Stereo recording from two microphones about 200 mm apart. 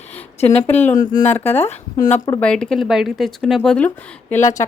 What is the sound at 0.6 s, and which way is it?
A woman's voice, 10° left (ahead or behind).